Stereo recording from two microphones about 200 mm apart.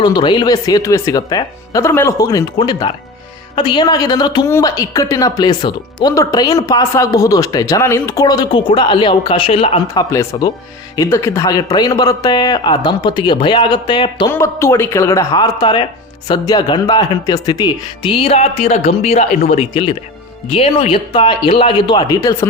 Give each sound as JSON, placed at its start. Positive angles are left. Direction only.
{"t": 0.0, "sound": "speech", "side_deg": 20}